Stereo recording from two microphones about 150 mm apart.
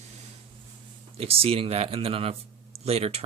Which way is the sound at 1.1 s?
40° right (ahead or behind).